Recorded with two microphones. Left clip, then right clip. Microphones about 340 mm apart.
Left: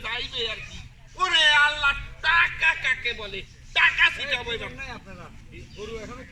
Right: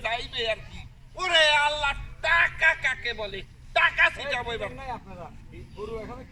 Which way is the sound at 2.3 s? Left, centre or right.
Centre.